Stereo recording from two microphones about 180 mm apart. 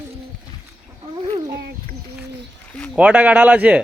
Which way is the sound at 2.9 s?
5° right (ahead or behind).